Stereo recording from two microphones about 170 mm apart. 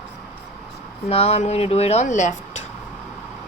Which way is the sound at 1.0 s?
35° left (ahead or behind).